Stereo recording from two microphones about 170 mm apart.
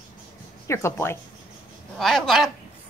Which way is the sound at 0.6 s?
15° left (ahead or behind).